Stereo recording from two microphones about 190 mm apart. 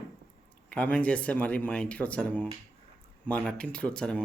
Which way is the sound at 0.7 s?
5° left (ahead or behind).